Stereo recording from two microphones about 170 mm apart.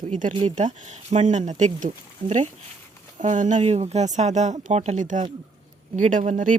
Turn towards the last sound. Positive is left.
turn(degrees=-50)  # may be behind; listen again after turning